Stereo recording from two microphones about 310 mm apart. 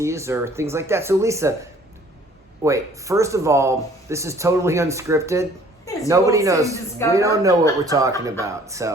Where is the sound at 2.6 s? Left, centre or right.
Centre.